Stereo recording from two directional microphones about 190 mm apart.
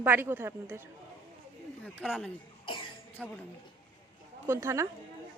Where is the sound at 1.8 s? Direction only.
Centre (ahead or behind).